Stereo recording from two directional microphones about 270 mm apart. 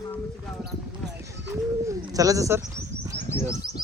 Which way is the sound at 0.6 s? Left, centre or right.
Right.